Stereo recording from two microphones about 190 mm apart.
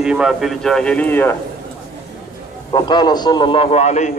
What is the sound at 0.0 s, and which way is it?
Speech, 5° right (ahead or behind).